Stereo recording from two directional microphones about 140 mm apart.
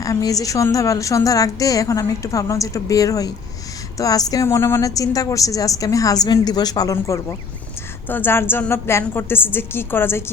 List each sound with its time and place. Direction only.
0.0 s a woman's voice: 25° left (ahead or behind)